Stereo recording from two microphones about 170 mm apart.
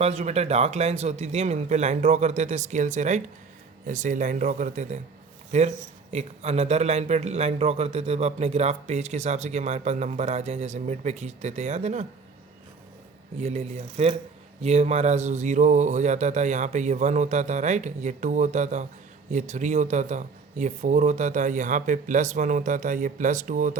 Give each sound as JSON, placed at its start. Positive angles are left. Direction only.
{"t": 0.0, "sound": "speech", "side_deg": -40}
{"t": 13.4, "sound": "speech", "side_deg": -40}